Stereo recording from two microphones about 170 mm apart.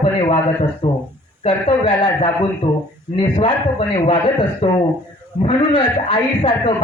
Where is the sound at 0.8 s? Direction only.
25° left (ahead or behind).